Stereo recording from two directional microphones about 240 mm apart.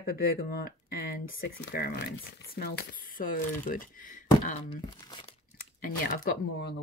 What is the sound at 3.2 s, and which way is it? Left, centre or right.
Speech, left.